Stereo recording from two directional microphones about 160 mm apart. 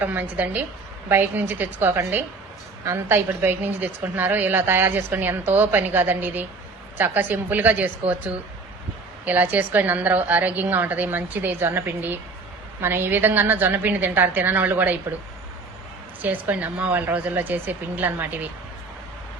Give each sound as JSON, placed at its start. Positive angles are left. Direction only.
{"t": 0.0, "sound": "a woman's voice", "side_deg": -10}
{"t": 9.2, "sound": "a woman's voice", "side_deg": -10}
{"t": 16.2, "sound": "a woman's voice", "side_deg": -10}